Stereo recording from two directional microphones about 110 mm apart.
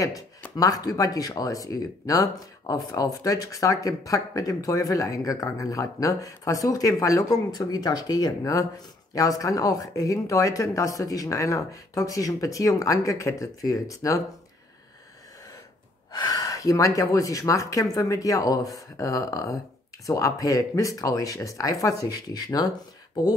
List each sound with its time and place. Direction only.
0.6 s speech: 35° left (ahead or behind)
16.1 s speech: 35° left (ahead or behind)